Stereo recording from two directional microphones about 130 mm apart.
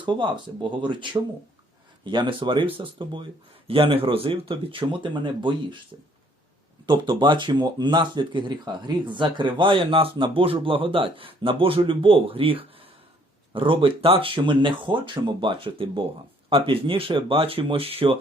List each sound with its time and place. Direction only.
0.0 s speech: 40° right (ahead or behind)